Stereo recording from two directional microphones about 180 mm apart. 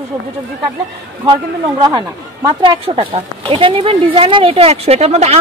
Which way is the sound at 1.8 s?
20° right (ahead or behind).